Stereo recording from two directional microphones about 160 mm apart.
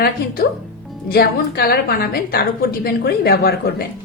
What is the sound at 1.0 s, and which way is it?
A woman's voice, 75° left (ahead or behind).